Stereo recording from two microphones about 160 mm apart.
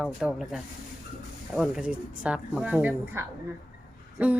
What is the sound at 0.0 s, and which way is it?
A woman's voice, 5° right (ahead or behind).